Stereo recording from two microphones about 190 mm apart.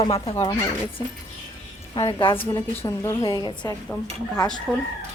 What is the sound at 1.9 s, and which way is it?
Speech, 25° left (ahead or behind).